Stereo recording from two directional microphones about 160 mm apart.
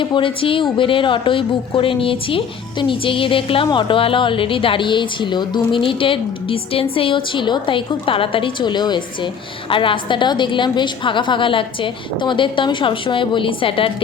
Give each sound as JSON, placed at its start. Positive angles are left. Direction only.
{"t": 0.0, "sound": "a woman's voice", "side_deg": 30}